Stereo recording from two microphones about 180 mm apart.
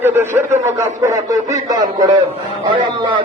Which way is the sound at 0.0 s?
15° right (ahead or behind).